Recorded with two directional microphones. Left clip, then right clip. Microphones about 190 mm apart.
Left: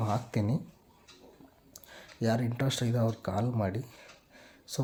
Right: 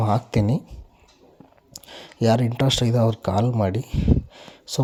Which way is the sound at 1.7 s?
35° right (ahead or behind).